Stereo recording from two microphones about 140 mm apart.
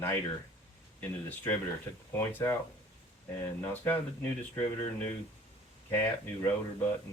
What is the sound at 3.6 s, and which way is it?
Speech, 15° left (ahead or behind).